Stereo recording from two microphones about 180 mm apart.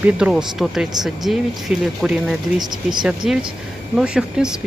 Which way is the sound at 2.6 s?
25° right (ahead or behind).